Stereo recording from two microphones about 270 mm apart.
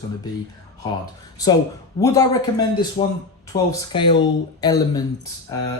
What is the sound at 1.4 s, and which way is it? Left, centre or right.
Speech, centre.